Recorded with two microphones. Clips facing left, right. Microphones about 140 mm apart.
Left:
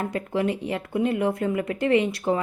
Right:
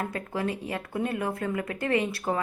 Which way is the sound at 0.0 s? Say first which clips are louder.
Left 5 dB; 20° left (ahead or behind).